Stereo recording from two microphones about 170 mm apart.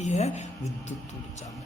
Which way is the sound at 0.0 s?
40° left (ahead or behind).